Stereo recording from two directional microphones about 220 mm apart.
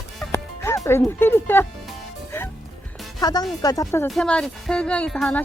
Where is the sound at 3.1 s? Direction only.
15° left (ahead or behind).